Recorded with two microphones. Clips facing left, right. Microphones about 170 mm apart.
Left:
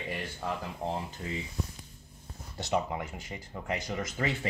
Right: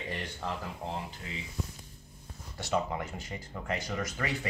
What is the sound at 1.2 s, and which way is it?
Speech, 35° left (ahead or behind).